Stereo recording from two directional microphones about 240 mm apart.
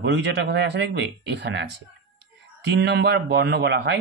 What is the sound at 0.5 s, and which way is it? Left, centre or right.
Speech, right.